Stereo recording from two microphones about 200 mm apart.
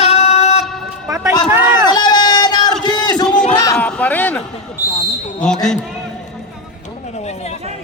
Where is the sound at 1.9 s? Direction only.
20° left (ahead or behind).